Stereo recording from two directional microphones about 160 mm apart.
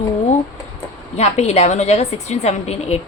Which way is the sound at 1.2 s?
45° left (ahead or behind).